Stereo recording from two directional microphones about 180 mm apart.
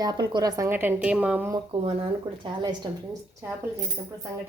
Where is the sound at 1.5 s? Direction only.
30° right (ahead or behind).